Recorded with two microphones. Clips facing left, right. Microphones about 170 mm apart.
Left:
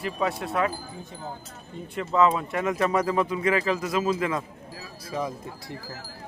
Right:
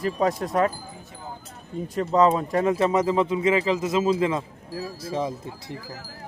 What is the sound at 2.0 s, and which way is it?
Speech, 40° right (ahead or behind).